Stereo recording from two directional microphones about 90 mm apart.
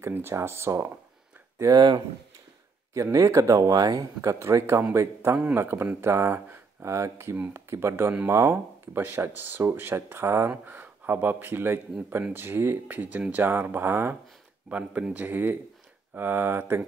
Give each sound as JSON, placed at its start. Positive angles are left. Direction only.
{"t": 0.0, "sound": "speech", "side_deg": -25}
{"t": 1.8, "sound": "speech", "side_deg": -55}
{"t": 2.9, "sound": "speech", "side_deg": -40}